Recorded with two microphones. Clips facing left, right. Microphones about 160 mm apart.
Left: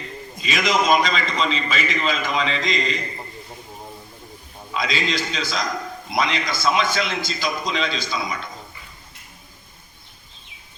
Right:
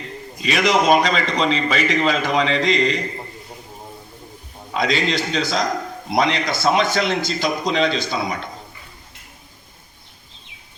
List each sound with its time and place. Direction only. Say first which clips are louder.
0.4 s a man's voice: right 4 dB; 70° right (ahead or behind)
4.8 s a man's voice: right 4 dB; 65° right (ahead or behind)